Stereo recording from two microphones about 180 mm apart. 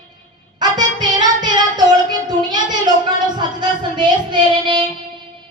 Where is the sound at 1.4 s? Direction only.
25° right (ahead or behind).